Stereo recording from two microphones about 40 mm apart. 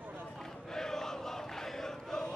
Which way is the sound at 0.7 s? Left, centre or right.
Centre.